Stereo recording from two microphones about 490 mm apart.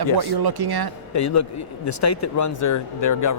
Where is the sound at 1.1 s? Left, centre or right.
Left.